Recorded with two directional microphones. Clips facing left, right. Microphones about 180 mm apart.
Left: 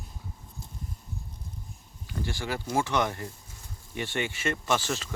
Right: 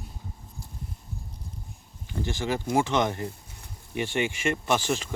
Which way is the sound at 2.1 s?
20° right (ahead or behind).